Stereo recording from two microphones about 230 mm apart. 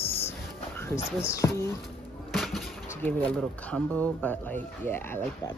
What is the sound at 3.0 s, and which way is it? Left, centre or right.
Speech, centre.